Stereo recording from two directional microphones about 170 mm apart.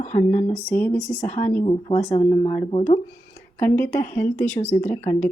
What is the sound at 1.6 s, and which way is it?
Speech, 35° left (ahead or behind).